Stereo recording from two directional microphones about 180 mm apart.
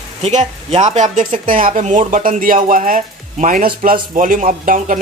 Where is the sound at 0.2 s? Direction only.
40° right (ahead or behind).